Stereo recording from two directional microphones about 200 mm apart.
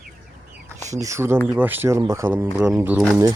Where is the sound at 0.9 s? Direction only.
15° right (ahead or behind).